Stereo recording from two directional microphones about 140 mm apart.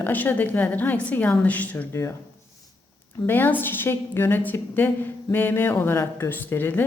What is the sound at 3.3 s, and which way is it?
A woman's voice, 15° left (ahead or behind).